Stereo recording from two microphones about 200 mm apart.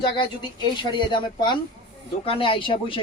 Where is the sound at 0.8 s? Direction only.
25° left (ahead or behind).